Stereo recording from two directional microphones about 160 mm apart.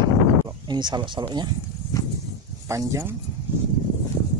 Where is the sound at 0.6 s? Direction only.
25° right (ahead or behind).